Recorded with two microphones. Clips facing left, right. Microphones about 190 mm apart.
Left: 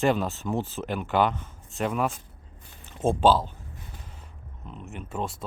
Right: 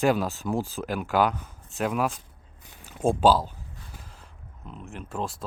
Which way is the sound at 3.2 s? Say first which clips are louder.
Even; 5° right (ahead or behind).